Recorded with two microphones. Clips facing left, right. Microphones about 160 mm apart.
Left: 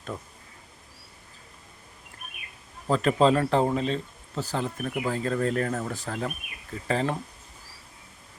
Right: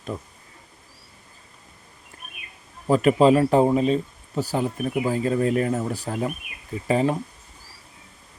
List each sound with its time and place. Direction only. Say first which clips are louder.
2.8 s speech: right 5 dB; 10° right (ahead or behind)